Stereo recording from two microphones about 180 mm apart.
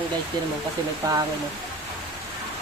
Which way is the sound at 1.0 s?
20° right (ahead or behind).